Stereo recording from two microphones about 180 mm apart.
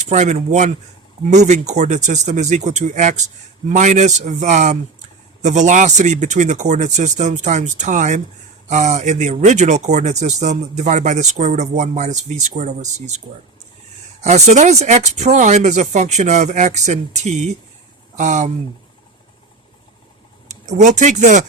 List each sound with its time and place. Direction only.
0.1 s speech: 40° right (ahead or behind)
20.5 s speech: 40° right (ahead or behind)